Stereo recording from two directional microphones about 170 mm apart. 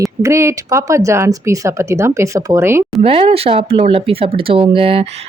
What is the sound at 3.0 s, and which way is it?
Speech, 35° right (ahead or behind).